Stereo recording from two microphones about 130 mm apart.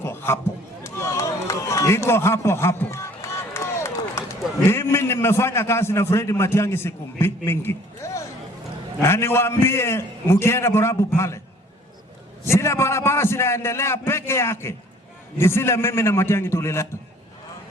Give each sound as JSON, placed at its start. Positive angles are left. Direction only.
{"t": 0.0, "sound": "a sound", "side_deg": 20}
{"t": 0.9, "sound": "run", "side_deg": 20}
{"t": 4.6, "sound": "a man's voice", "side_deg": 20}
{"t": 12.5, "sound": "a man's voice", "side_deg": 20}